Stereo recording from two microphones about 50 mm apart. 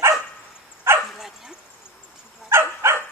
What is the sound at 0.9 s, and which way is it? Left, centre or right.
Dog, right.